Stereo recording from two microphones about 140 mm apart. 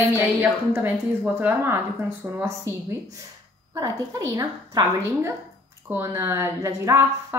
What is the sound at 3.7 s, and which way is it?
A woman's voice, 25° right (ahead or behind).